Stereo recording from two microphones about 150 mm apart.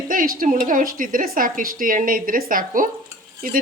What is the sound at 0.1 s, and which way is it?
A woman's voice, 65° right (ahead or behind).